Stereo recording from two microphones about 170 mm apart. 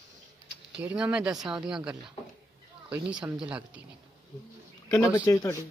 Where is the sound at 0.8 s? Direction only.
5° right (ahead or behind).